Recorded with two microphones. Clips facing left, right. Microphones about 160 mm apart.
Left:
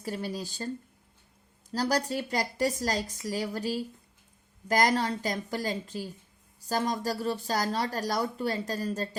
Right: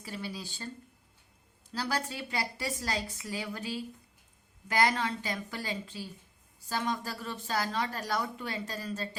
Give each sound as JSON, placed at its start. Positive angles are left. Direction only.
{"t": 0.0, "sound": "speech", "side_deg": 40}
{"t": 1.7, "sound": "speech", "side_deg": 40}